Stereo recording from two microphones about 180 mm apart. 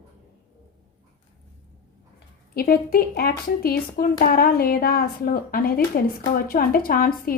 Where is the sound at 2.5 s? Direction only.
55° left (ahead or behind).